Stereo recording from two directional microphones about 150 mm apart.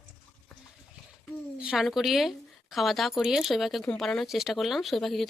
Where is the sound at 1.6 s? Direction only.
5° right (ahead or behind).